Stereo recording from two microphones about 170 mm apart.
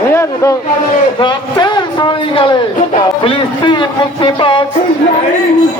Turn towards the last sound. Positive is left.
turn(degrees=30)  # may be behind; listen again after turning